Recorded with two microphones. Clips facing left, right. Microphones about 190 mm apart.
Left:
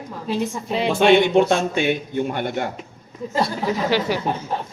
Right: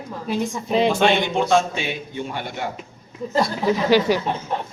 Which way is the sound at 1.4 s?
55° left (ahead or behind).